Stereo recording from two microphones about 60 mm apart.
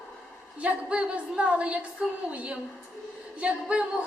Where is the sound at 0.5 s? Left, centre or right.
Centre.